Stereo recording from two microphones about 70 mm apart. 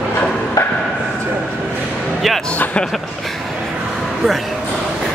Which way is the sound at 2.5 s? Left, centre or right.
Left.